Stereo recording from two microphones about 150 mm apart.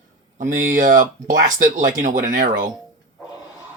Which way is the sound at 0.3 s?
60° right (ahead or behind).